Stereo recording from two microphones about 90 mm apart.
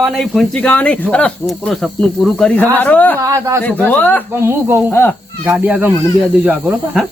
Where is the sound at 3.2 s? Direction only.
35° right (ahead or behind).